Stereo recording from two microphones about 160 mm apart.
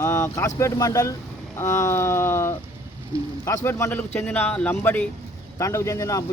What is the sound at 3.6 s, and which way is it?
Speech, 15° left (ahead or behind).